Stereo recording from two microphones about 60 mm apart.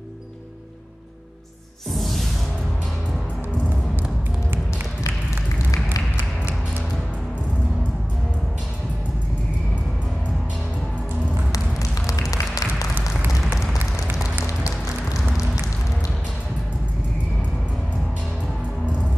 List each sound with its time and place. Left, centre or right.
2.0 s music: centre
11.5 s a sound: left
14.4 s music: left